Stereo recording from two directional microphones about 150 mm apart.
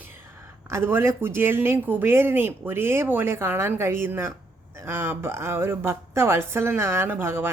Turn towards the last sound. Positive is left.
turn(degrees=-15)  # may be behind; listen again after turning